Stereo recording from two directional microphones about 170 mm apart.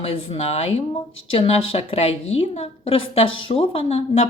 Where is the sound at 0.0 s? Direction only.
35° left (ahead or behind).